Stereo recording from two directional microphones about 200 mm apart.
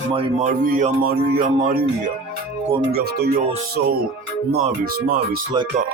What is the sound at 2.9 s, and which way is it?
Speech, 50° right (ahead or behind).